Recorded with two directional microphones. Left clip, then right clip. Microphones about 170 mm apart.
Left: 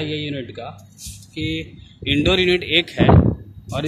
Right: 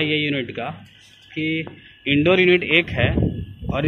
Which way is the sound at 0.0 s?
10° left (ahead or behind).